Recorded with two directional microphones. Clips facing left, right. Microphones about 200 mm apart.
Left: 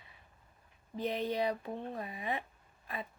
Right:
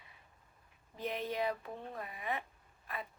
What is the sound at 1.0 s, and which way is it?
Speech, 25° left (ahead or behind).